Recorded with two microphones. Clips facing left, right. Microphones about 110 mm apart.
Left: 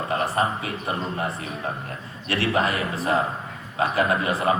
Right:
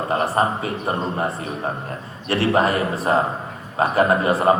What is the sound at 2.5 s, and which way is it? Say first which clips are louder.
Speech: right 5 dB; 35° right (ahead or behind).